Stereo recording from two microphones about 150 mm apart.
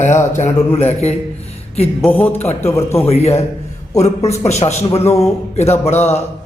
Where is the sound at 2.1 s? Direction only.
10° left (ahead or behind).